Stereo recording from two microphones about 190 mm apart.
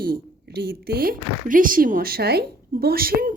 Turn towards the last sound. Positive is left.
turn(degrees=-50)  # may be behind; listen again after turning